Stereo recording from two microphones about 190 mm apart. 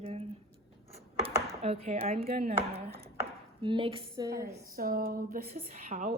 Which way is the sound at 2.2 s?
55° right (ahead or behind).